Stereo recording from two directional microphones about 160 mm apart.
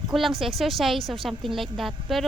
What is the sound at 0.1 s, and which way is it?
A woman's voice, centre (ahead or behind).